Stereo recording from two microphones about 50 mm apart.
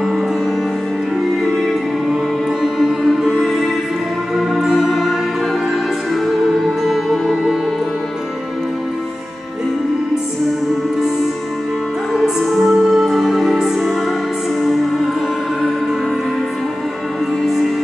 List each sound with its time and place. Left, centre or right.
1.4 s music: centre
3.2 s music: centre
6.8 s music: centre
12.1 s music: centre